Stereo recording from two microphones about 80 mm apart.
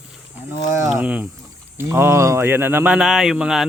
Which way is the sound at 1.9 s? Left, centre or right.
Right.